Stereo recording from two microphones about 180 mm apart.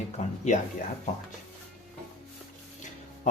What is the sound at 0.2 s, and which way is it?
Speech, 40° left (ahead or behind).